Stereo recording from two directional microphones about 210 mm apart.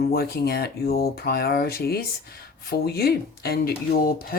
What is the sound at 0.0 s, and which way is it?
Speech, 50° left (ahead or behind).